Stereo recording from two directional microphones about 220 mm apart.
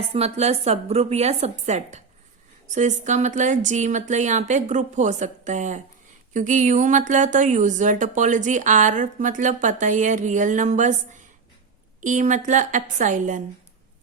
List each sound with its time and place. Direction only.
0.1 s a woman's voice: 30° right (ahead or behind)